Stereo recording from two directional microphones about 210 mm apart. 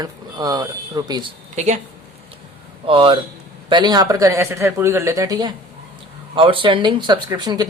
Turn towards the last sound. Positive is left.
turn(degrees=-20)  # may be behind; listen again after turning